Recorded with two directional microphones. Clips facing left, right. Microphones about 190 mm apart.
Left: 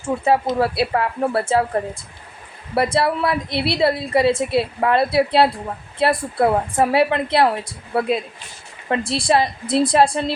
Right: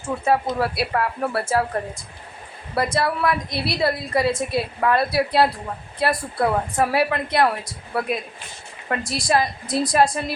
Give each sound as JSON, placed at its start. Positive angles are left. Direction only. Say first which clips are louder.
{"t": 0.3, "sound": "a woman's voice", "louder": "left 3 dB", "side_deg": 25}
{"t": 2.7, "sound": "a woman's voice", "louder": "left 3 dB", "side_deg": 25}